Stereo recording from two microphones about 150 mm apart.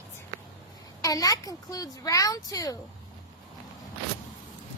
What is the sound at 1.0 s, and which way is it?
A woman's voice, 25° left (ahead or behind).